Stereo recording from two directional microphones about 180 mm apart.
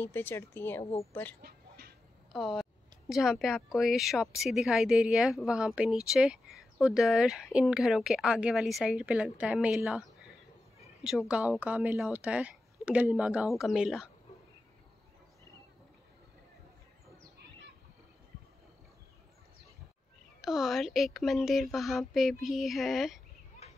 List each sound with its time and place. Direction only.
0.0 s speech: 10° left (ahead or behind)
1.4 s dog: 60° right (ahead or behind)
2.3 s speech: centre (ahead or behind)
20.4 s speech: centre (ahead or behind)